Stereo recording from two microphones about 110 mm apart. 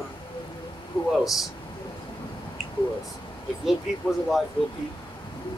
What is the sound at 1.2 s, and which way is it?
Speech, centre (ahead or behind).